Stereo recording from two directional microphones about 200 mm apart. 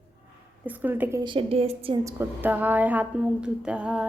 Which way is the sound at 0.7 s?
10° right (ahead or behind).